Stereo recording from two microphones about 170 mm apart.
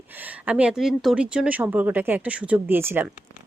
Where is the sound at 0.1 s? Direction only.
10° right (ahead or behind).